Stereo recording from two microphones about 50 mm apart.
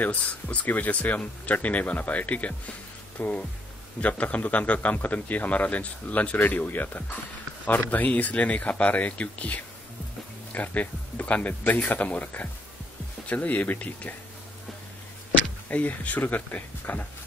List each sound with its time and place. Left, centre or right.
0.0 s a man's voice: left
15.7 s a man's voice: left